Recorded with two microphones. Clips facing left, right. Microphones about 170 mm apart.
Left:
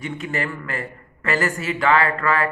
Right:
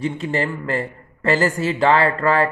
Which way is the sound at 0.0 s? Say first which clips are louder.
Right 5 dB; 30° right (ahead or behind).